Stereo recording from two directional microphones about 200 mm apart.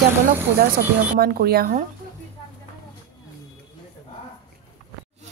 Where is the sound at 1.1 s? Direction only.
50° right (ahead or behind).